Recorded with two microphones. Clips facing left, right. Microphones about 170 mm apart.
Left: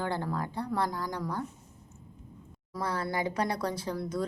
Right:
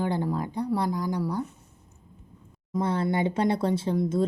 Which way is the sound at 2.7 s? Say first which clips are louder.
Right 7 dB; 25° right (ahead or behind).